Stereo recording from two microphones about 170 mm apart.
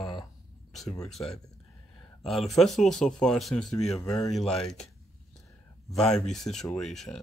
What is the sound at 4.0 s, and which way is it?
Speech, 20° left (ahead or behind).